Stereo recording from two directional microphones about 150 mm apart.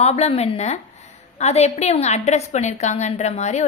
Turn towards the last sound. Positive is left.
turn(degrees=50)  # may be behind; listen again after turning